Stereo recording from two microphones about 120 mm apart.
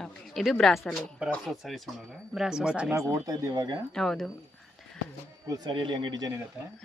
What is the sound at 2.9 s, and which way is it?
Speech, 25° right (ahead or behind).